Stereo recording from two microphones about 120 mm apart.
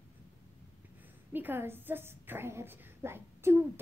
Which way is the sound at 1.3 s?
15° right (ahead or behind).